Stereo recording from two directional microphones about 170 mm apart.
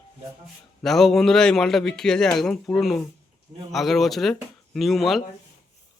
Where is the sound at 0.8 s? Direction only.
Centre (ahead or behind).